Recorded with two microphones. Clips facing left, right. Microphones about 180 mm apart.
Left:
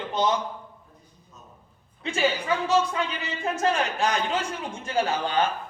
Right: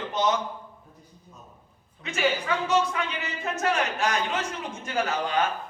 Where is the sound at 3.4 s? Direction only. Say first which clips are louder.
Left 2 dB; 30° left (ahead or behind).